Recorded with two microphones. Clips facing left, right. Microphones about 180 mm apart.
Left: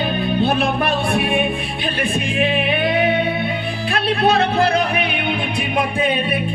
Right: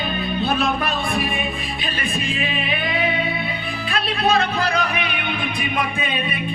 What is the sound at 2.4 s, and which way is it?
Music, 60° left (ahead or behind).